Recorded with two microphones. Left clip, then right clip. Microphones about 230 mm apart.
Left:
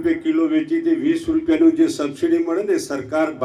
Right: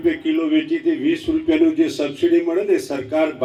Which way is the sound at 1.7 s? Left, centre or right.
Right.